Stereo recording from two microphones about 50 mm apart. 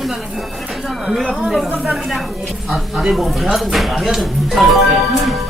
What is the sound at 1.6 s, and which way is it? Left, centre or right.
Speech, right.